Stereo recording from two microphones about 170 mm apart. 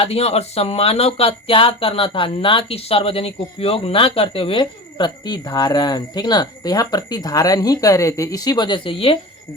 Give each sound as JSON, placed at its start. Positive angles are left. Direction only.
{"t": 0.0, "sound": "speech", "side_deg": 40}